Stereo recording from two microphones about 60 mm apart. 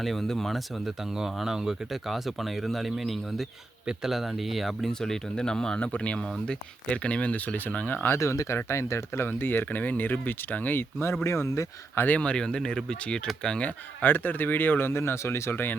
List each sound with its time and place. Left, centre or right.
0.0 s speech: centre; by 7.9 s left
8.2 s speech: left
9.6 s speech: left
11.2 s speech: left
11.9 s speech: left
13.7 s speech: left